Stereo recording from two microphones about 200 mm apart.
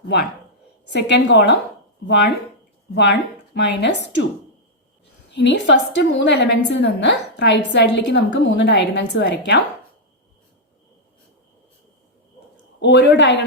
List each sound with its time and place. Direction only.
0.9 s a woman's voice: 60° left (ahead or behind)
2.9 s a woman's voice: 60° left (ahead or behind)
5.3 s a woman's voice: 60° left (ahead or behind)
12.8 s a woman's voice: 60° left (ahead or behind)